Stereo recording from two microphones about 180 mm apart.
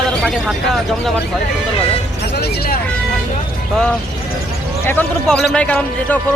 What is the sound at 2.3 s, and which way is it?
Vehicle, 60° left (ahead or behind).